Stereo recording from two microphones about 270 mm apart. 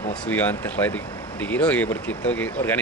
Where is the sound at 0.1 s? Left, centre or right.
Centre.